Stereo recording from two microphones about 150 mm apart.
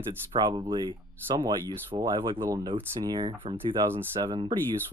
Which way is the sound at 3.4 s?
35° right (ahead or behind).